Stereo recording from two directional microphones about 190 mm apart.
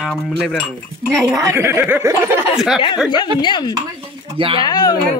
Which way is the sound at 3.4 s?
25° left (ahead or behind).